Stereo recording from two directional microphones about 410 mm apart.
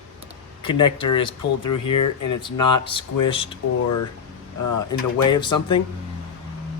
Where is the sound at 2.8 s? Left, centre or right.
Centre.